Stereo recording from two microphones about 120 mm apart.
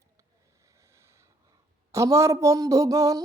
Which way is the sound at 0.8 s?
25° right (ahead or behind).